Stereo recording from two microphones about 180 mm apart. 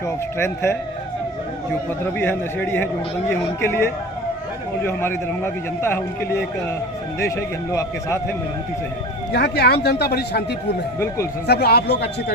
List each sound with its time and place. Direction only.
0.3 s a man's voice: 15° left (ahead or behind)
2.1 s a man's voice: 10° left (ahead or behind)
7.2 s a man's voice: 15° left (ahead or behind)
9.3 s speech: 60° left (ahead or behind)
11.4 s speech: 65° left (ahead or behind)